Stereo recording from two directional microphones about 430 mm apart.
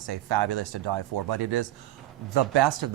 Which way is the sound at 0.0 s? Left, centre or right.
Right.